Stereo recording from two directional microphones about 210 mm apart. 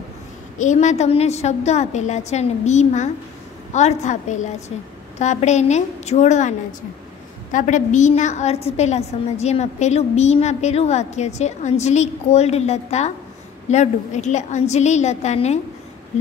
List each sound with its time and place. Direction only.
0.6 s a woman's voice: 35° left (ahead or behind)
7.5 s a woman's voice: 35° left (ahead or behind)